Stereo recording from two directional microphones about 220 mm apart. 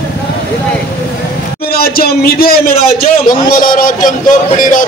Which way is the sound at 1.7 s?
45° left (ahead or behind).